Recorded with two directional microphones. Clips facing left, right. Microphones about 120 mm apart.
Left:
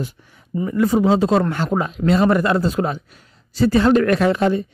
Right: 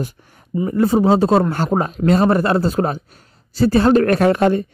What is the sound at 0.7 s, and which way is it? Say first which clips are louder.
Speech: right 2 dB; 35° right (ahead or behind).